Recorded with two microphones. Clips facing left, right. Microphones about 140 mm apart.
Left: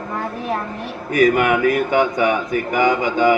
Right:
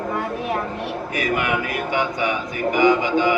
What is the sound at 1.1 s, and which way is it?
A man's voice, 45° left (ahead or behind).